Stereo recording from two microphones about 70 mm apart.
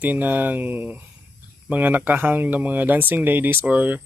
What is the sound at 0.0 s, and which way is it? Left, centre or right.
Speech, right.